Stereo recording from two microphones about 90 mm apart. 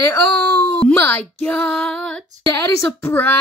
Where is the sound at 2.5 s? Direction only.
25° left (ahead or behind).